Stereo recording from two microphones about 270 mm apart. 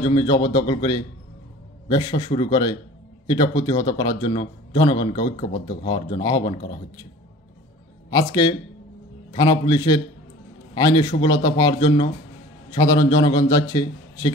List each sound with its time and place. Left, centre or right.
0.0 s a man's voice: centre
8.1 s a man's voice: centre